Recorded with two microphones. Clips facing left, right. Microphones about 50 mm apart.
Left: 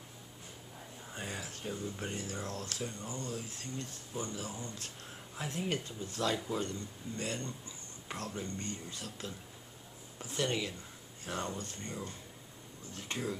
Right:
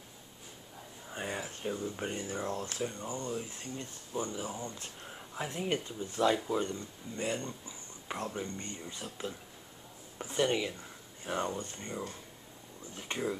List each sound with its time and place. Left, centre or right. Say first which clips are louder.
1.1 s speech: right 5 dB; right